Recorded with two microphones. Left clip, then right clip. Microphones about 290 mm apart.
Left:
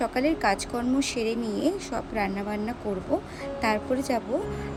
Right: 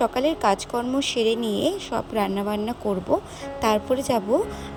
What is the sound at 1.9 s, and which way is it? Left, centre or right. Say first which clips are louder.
Speech: right 4 dB; right.